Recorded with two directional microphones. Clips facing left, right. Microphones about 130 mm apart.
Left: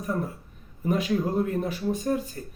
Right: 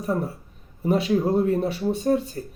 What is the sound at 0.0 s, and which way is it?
Speech, 35° right (ahead or behind).